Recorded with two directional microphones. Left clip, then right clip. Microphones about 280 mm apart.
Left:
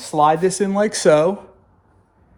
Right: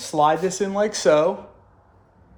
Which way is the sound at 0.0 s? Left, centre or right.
Left.